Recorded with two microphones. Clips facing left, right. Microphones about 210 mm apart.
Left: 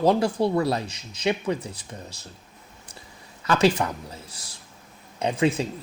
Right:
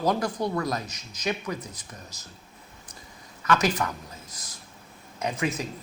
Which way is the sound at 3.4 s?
30° left (ahead or behind).